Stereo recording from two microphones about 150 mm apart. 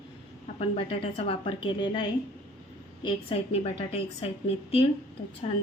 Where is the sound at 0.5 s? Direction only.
40° left (ahead or behind).